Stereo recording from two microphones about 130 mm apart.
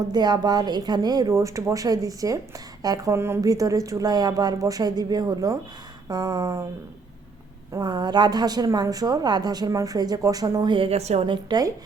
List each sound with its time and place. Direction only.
0.1 s a woman's voice: 30° right (ahead or behind)
7.7 s a woman's voice: 35° right (ahead or behind); by 11.3 s 55° right (ahead or behind)
11.3 s a woman's voice: 35° right (ahead or behind)